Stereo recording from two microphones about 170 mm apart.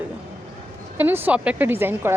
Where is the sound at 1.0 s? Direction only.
10° right (ahead or behind).